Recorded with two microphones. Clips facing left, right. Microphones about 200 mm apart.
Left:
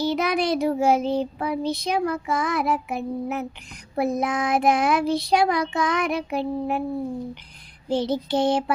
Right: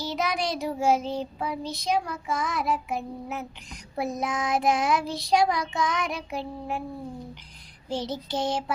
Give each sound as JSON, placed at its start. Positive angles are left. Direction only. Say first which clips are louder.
{"t": 0.0, "sound": "child singing", "louder": "left 6 dB", "side_deg": 60}
{"t": 7.9, "sound": "child singing", "louder": "left 7 dB", "side_deg": 60}